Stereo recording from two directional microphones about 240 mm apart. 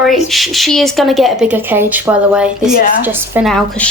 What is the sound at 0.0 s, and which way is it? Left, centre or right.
A woman's voice, centre.